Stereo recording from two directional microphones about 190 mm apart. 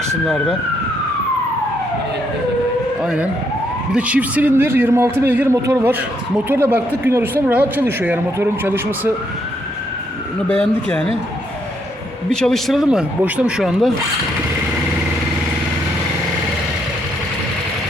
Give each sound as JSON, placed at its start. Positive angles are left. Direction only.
{"t": 0.3, "sound": "speech", "side_deg": 0}
{"t": 3.0, "sound": "speech", "side_deg": -5}
{"t": 10.5, "sound": "speech", "side_deg": 5}
{"t": 12.3, "sound": "speech", "side_deg": 5}